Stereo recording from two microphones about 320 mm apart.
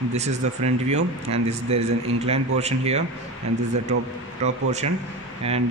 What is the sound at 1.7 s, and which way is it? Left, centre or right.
A man's voice, centre.